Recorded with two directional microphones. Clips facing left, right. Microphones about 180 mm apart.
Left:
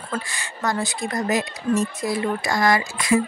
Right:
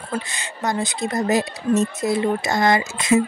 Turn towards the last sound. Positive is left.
turn(degrees=-25)  # may be behind; listen again after turning